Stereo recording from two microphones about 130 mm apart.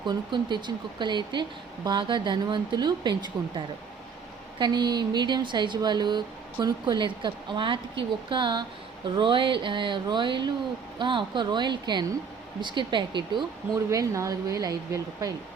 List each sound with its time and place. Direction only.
0.0 s speech: 35° right (ahead or behind)
13.9 s a woman's voice: 25° right (ahead or behind)